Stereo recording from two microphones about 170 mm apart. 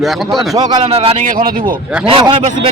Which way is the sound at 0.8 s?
35° right (ahead or behind).